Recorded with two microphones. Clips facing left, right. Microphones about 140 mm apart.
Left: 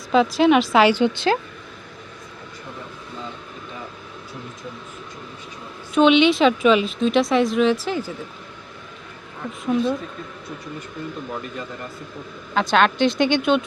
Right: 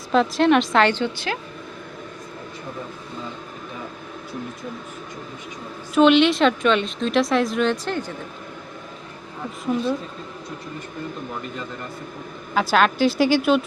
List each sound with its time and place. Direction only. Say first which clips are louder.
0.1 s speech: left 1 dB; centre (ahead or behind)
1.1 s speech: left 8 dB; 25° left (ahead or behind)
5.9 s speech: even; centre (ahead or behind)
9.6 s speech: left 2 dB; centre (ahead or behind)
12.5 s speech: left 1 dB; 5° right (ahead or behind)